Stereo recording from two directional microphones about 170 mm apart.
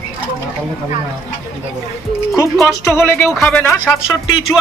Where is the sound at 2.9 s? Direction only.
10° left (ahead or behind).